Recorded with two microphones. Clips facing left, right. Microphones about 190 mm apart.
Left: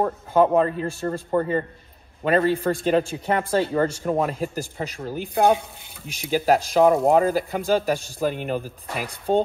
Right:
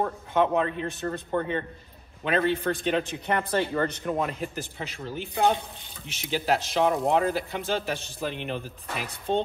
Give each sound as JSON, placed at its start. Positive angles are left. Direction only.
{"t": 0.0, "sound": "a man's voice", "side_deg": 35}
{"t": 6.4, "sound": "a man's voice", "side_deg": 40}